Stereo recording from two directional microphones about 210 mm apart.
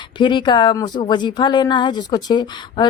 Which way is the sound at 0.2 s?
20° left (ahead or behind).